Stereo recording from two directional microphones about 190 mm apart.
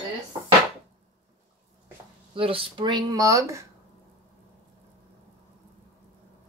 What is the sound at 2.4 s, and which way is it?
Speech, 30° right (ahead or behind).